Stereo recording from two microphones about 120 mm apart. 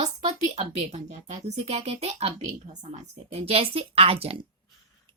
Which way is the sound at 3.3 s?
55° right (ahead or behind).